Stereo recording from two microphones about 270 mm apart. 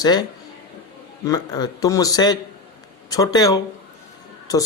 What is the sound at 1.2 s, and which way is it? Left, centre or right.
Speech, centre.